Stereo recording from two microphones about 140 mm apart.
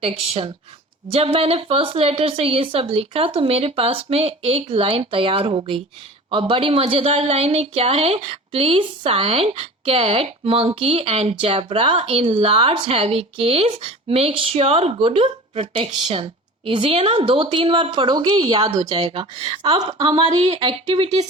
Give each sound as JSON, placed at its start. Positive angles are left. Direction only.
{"t": 0.0, "sound": "a woman's voice", "side_deg": -45}